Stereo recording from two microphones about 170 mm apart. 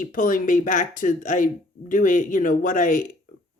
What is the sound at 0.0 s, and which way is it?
Speech, 50° left (ahead or behind).